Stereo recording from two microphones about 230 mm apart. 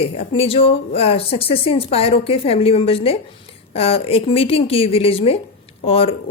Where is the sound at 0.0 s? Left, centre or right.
Left.